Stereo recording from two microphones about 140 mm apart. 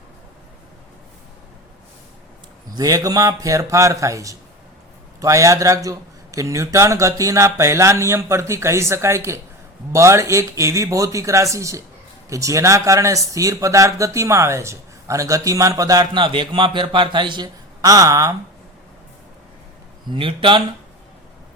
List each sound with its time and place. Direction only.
2.7 s a man's voice: 25° right (ahead or behind)
20.1 s speech: 40° right (ahead or behind)